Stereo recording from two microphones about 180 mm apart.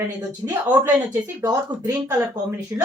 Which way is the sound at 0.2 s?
20° right (ahead or behind).